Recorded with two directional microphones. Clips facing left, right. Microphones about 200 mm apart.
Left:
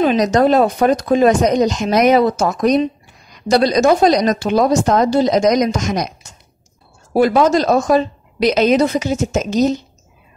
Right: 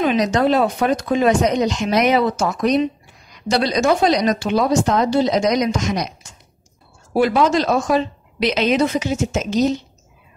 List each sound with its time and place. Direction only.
0.0 s speech: 40° left (ahead or behind)
7.2 s speech: 40° left (ahead or behind)